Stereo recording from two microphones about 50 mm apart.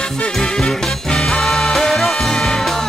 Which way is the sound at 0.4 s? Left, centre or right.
Centre.